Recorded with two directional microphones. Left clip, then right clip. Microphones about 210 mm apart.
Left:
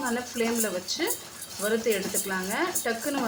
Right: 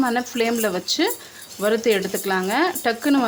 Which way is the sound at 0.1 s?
55° right (ahead or behind).